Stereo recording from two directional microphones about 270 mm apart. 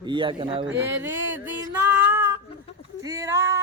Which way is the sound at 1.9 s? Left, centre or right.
Centre.